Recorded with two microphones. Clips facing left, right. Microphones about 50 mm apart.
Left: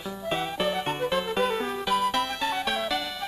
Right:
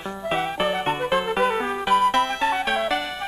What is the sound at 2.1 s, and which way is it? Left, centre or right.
Music, right.